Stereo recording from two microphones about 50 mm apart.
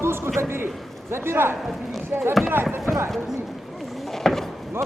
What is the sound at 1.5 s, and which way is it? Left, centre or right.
Speech, centre.